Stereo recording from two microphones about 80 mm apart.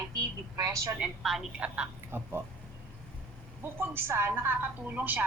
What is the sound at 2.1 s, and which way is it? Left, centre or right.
Speech, right.